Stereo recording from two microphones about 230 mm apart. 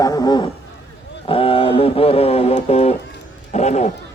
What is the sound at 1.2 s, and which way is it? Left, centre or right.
Speech, left.